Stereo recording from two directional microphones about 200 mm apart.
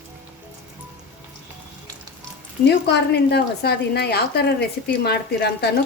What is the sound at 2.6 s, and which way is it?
A woman's voice, 55° left (ahead or behind).